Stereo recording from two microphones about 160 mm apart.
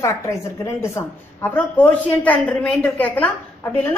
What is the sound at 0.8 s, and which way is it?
A woman's voice, 15° left (ahead or behind).